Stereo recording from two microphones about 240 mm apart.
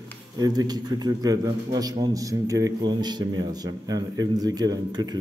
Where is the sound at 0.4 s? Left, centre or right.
Centre.